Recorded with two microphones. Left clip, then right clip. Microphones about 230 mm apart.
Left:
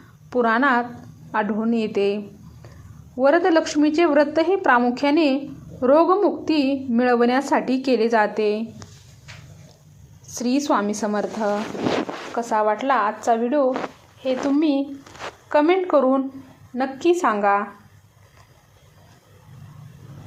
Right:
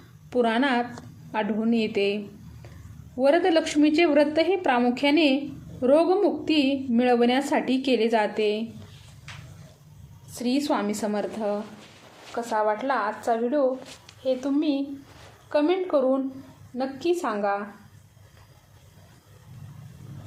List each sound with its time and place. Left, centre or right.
0.3 s a woman's voice: centre
10.3 s a woman's voice: left